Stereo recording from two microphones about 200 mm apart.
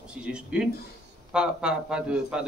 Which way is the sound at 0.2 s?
5° right (ahead or behind).